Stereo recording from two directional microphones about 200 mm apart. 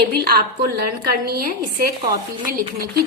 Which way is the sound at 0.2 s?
50° right (ahead or behind).